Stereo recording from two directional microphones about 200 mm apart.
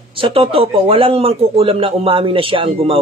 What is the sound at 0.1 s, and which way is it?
Speech, 25° right (ahead or behind).